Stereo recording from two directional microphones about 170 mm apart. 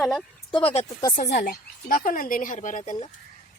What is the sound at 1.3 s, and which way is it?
Speech, 55° left (ahead or behind).